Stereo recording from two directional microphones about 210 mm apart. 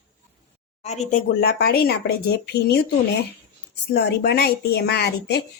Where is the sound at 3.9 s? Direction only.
50° left (ahead or behind).